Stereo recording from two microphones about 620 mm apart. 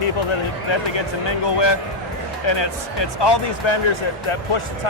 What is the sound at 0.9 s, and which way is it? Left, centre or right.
Speech, left.